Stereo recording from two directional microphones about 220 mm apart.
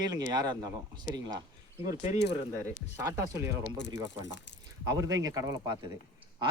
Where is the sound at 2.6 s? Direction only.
15° right (ahead or behind).